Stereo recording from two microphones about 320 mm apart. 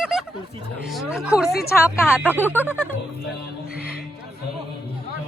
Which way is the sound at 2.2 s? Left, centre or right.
Centre.